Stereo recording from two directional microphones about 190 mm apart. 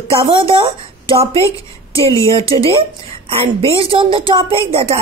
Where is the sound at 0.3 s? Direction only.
25° right (ahead or behind).